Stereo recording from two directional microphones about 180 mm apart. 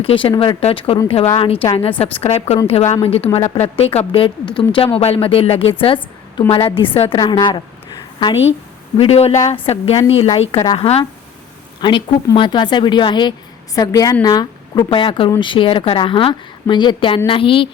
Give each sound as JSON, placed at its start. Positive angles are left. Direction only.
{"t": 0.0, "sound": "a woman's voice", "side_deg": 30}